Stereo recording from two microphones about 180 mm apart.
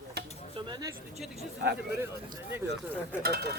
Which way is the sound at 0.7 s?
20° right (ahead or behind).